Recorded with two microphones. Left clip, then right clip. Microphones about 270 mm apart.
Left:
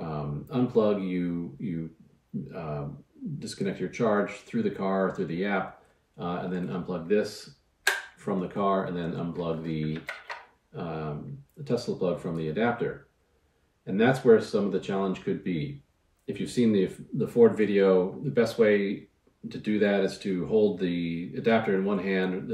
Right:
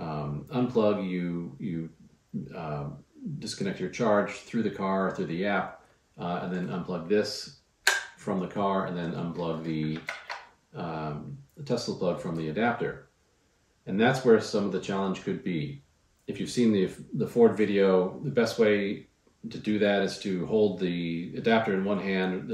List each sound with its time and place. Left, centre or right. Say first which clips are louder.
0.0 s speech: even; centre
13.8 s speech: left 1 dB; centre